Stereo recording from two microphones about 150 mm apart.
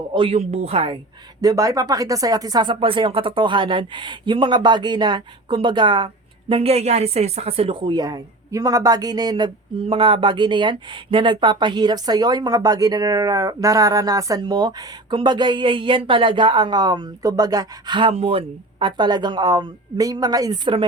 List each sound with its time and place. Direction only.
0.1 s speech: 35° right (ahead or behind)
1.4 s a woman's voice: 25° right (ahead or behind)
18.1 s a woman's voice: 40° right (ahead or behind)